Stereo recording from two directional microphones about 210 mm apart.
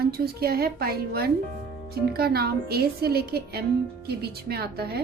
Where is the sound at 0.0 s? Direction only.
50° right (ahead or behind).